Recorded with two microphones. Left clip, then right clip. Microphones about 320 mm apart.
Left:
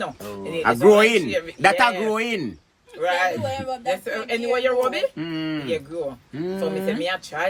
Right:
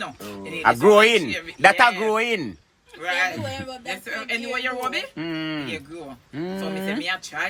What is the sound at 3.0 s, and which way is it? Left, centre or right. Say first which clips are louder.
Speech: left 2 dB; centre.